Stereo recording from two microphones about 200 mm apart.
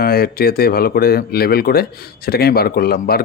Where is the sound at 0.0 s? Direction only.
50° left (ahead or behind).